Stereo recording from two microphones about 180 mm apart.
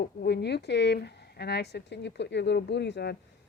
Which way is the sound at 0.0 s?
65° left (ahead or behind).